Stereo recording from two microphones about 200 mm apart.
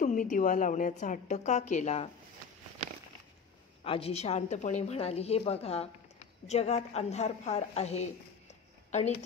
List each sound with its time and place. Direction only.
0.0 s a woman's voice: 40° left (ahead or behind)
3.8 s a woman's voice: 30° left (ahead or behind)